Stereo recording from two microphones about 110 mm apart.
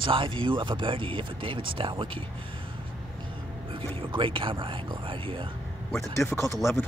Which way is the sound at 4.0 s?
50° right (ahead or behind).